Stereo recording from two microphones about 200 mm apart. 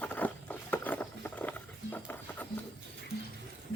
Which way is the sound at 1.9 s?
10° left (ahead or behind).